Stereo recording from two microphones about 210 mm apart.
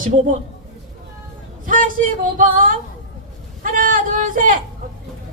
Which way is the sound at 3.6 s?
40° right (ahead or behind).